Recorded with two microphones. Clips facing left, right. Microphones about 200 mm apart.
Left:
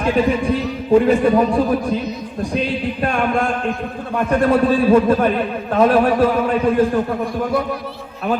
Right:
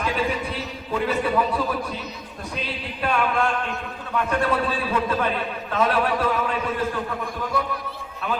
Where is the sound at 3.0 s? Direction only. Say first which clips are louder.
Left 2 dB; 45° left (ahead or behind).